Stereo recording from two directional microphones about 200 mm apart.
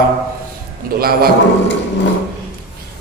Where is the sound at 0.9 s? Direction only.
50° right (ahead or behind).